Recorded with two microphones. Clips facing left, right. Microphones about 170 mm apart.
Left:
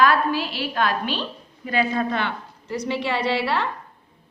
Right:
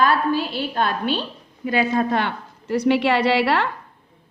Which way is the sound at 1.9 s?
45° right (ahead or behind).